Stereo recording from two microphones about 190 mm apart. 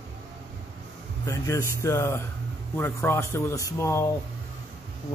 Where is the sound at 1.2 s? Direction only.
15° left (ahead or behind).